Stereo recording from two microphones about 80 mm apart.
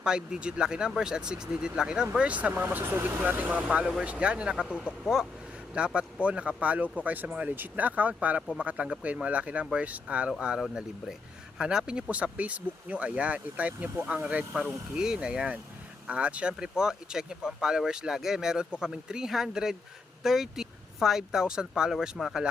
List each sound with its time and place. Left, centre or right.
0.0 s speech: centre